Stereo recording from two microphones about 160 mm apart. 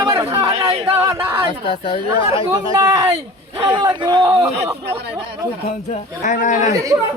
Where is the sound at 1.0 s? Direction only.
15° right (ahead or behind).